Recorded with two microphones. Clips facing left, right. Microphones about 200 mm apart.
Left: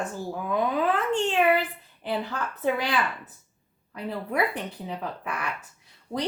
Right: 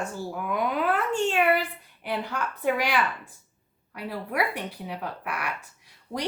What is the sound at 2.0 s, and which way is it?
Speech, 10° right (ahead or behind).